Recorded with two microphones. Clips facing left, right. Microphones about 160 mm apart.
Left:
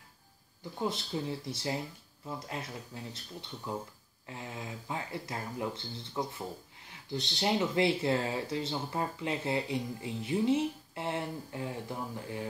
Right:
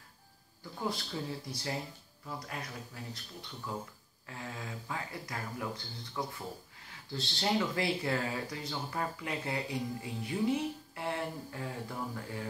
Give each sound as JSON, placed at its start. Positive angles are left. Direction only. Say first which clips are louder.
{"t": 0.7, "sound": "speech", "louder": "left 3 dB", "side_deg": 25}